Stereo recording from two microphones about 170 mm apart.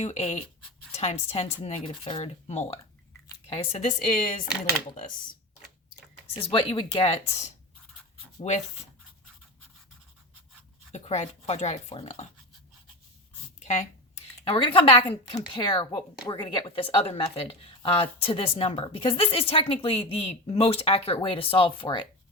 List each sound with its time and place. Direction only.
0.0 s a woman's voice: 40° left (ahead or behind)
6.5 s a woman's voice: 30° left (ahead or behind)
10.9 s speech: 40° left (ahead or behind)
13.6 s speech: 45° left (ahead or behind)